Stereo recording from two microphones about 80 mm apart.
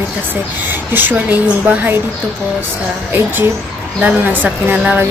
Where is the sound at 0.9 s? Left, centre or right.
Right.